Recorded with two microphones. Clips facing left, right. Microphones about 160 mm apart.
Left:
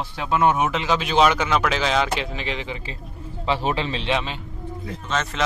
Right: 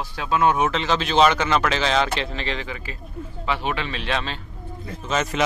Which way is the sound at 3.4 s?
30° left (ahead or behind).